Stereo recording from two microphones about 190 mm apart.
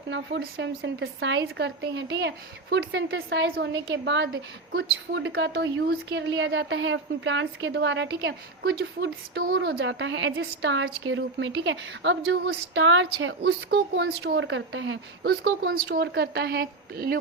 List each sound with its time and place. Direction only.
0.1 s a woman's voice: 65° right (ahead or behind)